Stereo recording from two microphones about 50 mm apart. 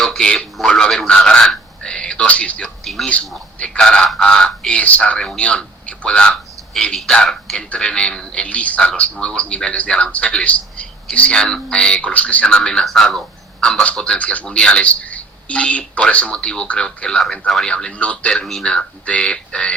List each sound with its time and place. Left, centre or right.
0.0 s speech: centre
2.6 s speech: centre
4.8 s a man's voice: left
12.5 s speech: centre
12.8 s speech: centre
13.6 s speech: centre
14.2 s a man's voice: left
14.4 s a man's voice: centre